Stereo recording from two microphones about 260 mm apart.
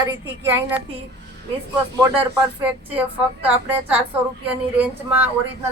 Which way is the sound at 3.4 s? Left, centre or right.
Centre.